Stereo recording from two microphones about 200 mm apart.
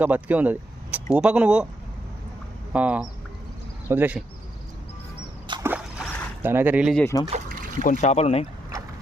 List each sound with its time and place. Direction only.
0.0 s speech: 10° right (ahead or behind)
2.7 s speech: 5° right (ahead or behind)
5.5 s a sound: 20° right (ahead or behind)
6.4 s speech: 10° right (ahead or behind)
6.9 s speech: 15° left (ahead or behind)
7.3 s a sound: 35° right (ahead or behind)
7.8 s speech: 30° left (ahead or behind)